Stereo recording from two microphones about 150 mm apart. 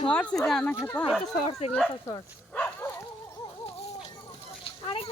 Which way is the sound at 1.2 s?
45° left (ahead or behind).